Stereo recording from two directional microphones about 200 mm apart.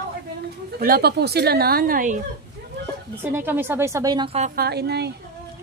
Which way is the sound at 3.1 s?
10° right (ahead or behind).